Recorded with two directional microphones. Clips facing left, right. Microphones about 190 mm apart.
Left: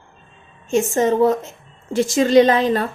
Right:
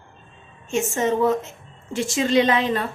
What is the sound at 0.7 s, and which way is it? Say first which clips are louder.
A woman's voice: left 5 dB; 35° left (ahead or behind).